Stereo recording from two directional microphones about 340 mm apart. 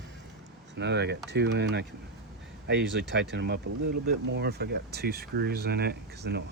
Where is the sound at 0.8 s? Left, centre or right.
Right.